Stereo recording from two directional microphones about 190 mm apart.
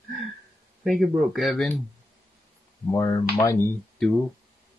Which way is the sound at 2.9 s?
20° left (ahead or behind).